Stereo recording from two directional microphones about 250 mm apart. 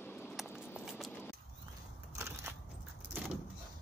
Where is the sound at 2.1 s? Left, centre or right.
Centre.